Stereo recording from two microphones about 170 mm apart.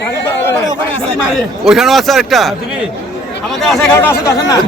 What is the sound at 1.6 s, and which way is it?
Speech, centre (ahead or behind).